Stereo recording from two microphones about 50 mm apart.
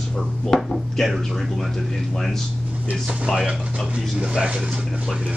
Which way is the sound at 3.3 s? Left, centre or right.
Centre.